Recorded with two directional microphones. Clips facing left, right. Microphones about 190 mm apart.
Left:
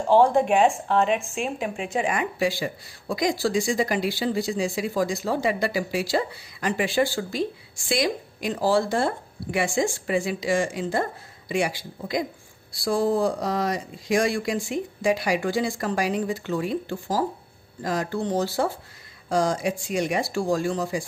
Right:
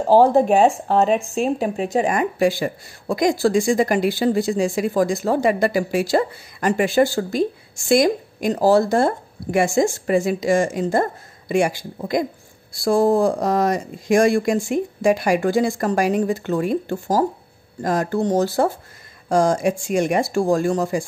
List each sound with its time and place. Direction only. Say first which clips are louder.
0.0 s speech: right 4 dB; 40° right (ahead or behind)